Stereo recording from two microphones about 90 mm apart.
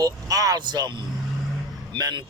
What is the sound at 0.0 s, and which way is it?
Speech, 45° right (ahead or behind).